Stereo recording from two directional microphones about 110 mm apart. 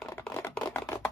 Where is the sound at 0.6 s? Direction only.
20° left (ahead or behind).